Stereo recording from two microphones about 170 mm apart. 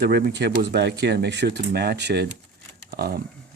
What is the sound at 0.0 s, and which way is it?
Speech, 70° right (ahead or behind).